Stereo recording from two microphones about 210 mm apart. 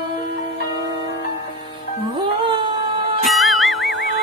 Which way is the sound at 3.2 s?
Centre (ahead or behind).